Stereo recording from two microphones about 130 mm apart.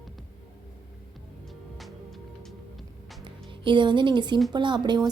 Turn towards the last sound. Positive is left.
turn(degrees=-35)  # may be behind; listen again after turning